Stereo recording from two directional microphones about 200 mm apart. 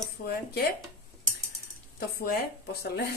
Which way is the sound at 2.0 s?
50° left (ahead or behind).